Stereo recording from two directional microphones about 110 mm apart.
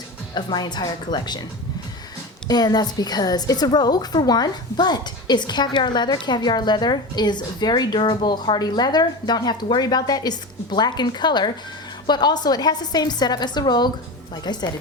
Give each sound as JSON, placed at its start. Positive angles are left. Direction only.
{"t": 0.3, "sound": "a woman's voice", "side_deg": 40}
{"t": 2.5, "sound": "a woman's voice", "side_deg": 40}